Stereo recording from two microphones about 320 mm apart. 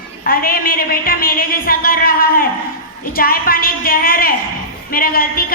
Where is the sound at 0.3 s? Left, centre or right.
Left.